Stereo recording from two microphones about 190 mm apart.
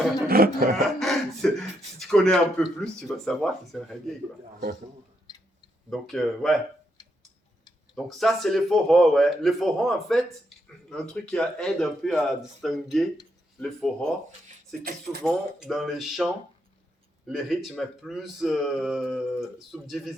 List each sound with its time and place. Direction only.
0.3 s a sound: 50° right (ahead or behind)
0.9 s speech: centre (ahead or behind)
5.9 s speech: centre (ahead or behind)
7.9 s speech: centre (ahead or behind)
15.2 s speech: centre (ahead or behind)
17.3 s speech: centre (ahead or behind)